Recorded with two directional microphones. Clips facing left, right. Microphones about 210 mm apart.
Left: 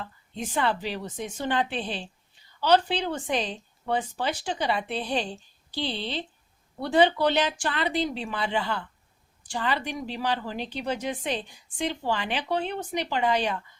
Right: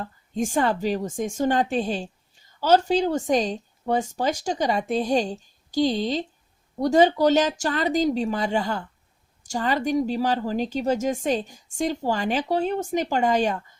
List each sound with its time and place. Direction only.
0.0 s speech: 45° right (ahead or behind)